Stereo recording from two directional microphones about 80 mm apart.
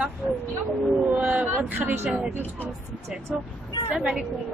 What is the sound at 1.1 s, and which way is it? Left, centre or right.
Vehicle, centre.